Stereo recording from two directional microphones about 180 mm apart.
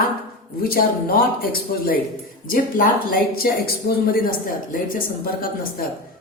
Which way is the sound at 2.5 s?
50° left (ahead or behind).